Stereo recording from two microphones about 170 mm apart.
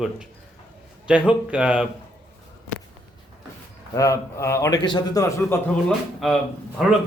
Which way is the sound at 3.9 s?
20° left (ahead or behind).